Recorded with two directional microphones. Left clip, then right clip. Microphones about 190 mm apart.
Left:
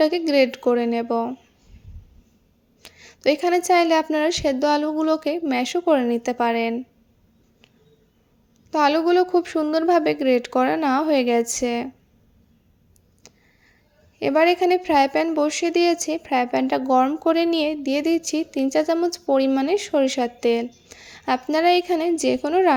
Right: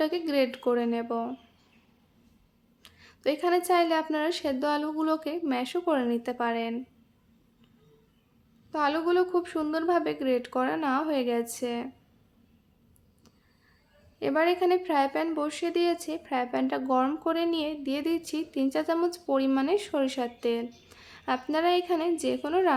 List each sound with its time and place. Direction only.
0.0 s a woman's voice: 25° left (ahead or behind)
2.8 s a woman's voice: 30° left (ahead or behind)
8.7 s a woman's voice: 30° left (ahead or behind)
13.2 s a sound: 30° left (ahead or behind)
14.2 s a woman's voice: 30° left (ahead or behind)